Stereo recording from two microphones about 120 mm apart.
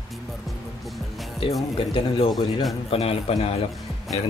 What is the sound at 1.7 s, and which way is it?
Speech, 50° left (ahead or behind).